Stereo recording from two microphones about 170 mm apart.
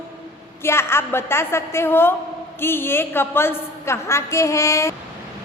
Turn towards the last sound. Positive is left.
turn(degrees=15)  # may be behind; listen again after turning